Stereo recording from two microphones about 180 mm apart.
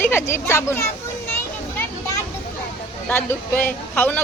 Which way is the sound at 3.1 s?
10° left (ahead or behind).